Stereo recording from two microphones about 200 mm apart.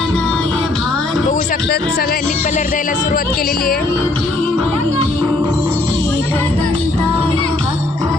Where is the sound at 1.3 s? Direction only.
40° left (ahead or behind).